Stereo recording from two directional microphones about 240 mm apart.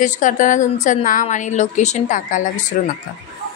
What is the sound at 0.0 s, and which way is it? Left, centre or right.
A woman's voice, left.